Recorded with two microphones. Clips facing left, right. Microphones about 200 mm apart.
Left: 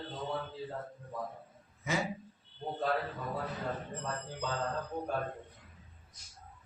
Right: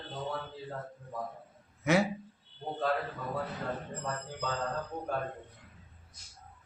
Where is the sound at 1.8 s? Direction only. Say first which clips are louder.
Right 8 dB; 70° right (ahead or behind).